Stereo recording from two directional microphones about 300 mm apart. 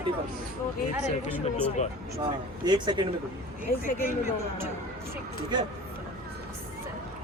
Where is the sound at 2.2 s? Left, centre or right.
Centre.